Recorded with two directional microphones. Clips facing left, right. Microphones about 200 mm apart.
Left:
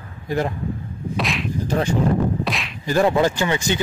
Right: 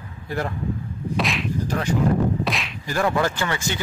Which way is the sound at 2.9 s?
20° left (ahead or behind).